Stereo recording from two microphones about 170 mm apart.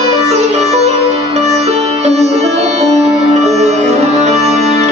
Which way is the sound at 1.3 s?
40° right (ahead or behind).